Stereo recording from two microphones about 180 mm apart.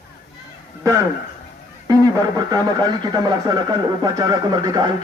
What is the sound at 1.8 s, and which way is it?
Speech, 20° right (ahead or behind).